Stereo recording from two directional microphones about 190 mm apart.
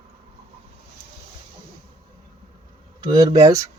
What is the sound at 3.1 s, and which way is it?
Speech, 20° right (ahead or behind).